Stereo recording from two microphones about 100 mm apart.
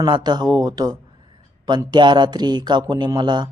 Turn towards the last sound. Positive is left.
turn(degrees=-45)  # may be behind; listen again after turning